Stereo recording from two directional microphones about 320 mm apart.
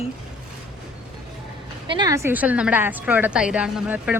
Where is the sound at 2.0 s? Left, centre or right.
Centre.